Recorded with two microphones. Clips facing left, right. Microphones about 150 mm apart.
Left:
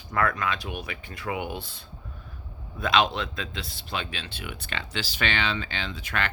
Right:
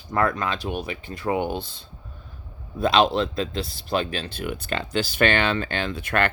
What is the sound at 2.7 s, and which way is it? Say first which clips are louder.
Speech: right 5 dB; 35° right (ahead or behind).